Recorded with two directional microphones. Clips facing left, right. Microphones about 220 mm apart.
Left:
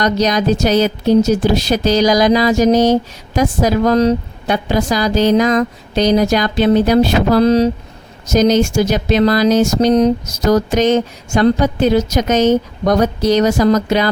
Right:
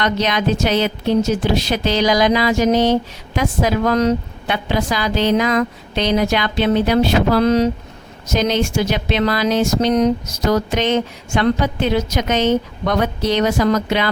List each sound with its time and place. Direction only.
0.0 s speech: 40° left (ahead or behind)